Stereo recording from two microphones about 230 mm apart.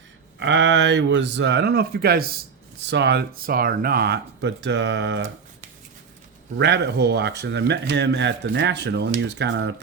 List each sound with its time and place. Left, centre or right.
0.3 s speech: right
6.6 s speech: right